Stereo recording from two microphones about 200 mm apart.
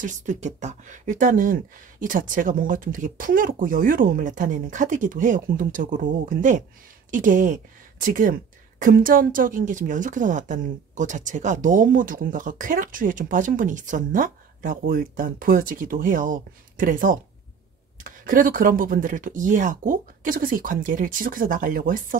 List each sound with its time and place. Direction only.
0.0 s speech: 40° right (ahead or behind)